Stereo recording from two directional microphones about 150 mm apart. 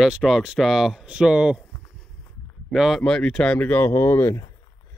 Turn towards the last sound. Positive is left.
turn(degrees=20)  # may be behind; listen again after turning